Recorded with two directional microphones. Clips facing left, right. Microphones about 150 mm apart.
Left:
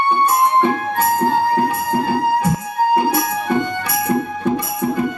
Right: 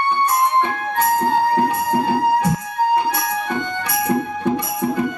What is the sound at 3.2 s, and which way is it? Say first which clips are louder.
Music: left 4 dB; 30° left (ahead or behind).